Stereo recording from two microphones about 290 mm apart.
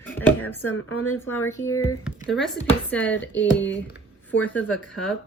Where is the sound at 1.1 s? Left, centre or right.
Centre.